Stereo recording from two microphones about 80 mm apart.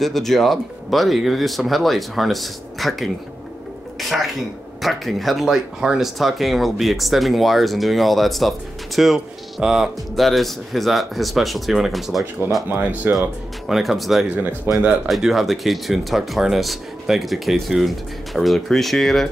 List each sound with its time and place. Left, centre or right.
0.0 s speech: centre
4.1 s speech: centre
12.6 s speech: right
13.7 s speech: centre
14.7 s speech: right
15.0 s speech: centre